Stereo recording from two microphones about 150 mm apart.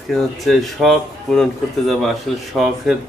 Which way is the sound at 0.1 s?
Centre (ahead or behind).